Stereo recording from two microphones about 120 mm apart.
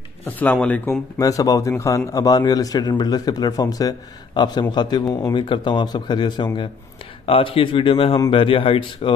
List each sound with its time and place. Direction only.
0.2 s speech: 15° left (ahead or behind)
1.2 s a man's voice: 30° left (ahead or behind); by 9.1 s 45° left (ahead or behind)